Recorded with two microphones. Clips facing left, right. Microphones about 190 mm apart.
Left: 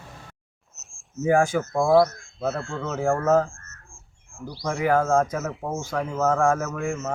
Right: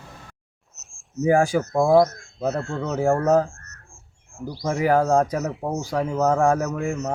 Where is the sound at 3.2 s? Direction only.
20° right (ahead or behind).